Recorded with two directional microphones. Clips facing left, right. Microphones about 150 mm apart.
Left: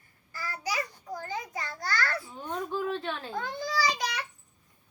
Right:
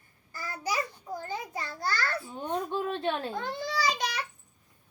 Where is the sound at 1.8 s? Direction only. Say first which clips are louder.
Even; 25° right (ahead or behind).